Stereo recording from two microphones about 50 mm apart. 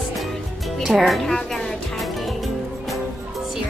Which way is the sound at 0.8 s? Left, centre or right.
Centre.